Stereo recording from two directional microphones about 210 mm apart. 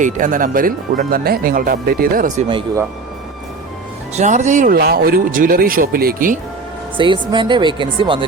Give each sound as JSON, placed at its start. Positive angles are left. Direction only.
{"t": 0.0, "sound": "speech", "side_deg": -40}
{"t": 2.5, "sound": "speech", "side_deg": -25}
{"t": 4.1, "sound": "speech", "side_deg": -35}
{"t": 6.9, "sound": "speech", "side_deg": -25}